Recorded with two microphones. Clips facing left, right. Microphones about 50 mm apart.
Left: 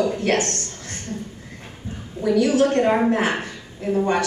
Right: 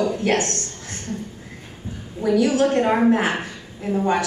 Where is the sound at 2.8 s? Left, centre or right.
Centre.